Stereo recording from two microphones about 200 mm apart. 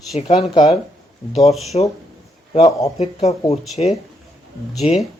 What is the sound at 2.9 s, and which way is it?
Speech, 30° left (ahead or behind).